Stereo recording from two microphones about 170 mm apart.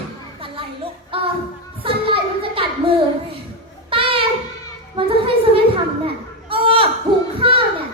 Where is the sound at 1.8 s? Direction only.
30° right (ahead or behind).